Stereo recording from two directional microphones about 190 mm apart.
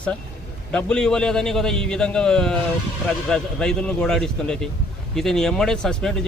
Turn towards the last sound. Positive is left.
turn(degrees=5)  # may be behind; listen again after turning